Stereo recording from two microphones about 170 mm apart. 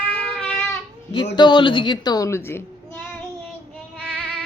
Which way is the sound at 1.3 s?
25° left (ahead or behind).